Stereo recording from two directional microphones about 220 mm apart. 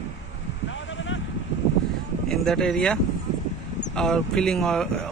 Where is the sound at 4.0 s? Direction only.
5° left (ahead or behind).